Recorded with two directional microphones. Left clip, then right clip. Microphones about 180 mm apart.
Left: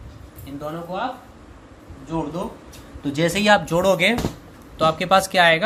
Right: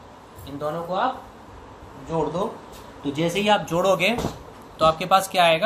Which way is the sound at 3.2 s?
65° left (ahead or behind).